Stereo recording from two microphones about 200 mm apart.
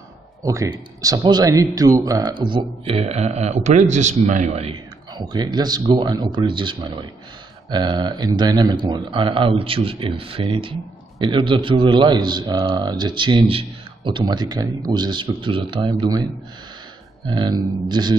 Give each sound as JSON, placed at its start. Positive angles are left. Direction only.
{"t": 0.4, "sound": "a man's voice", "side_deg": -15}
{"t": 17.3, "sound": "speech", "side_deg": -20}